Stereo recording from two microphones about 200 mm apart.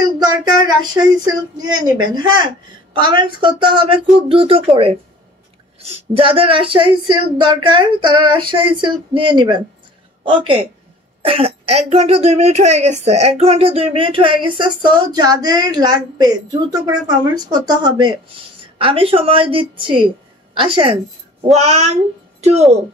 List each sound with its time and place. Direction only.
0.7 s a woman's voice: 20° right (ahead or behind)